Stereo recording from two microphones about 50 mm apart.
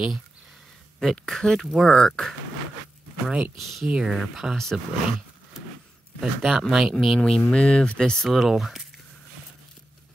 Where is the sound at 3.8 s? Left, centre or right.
Centre.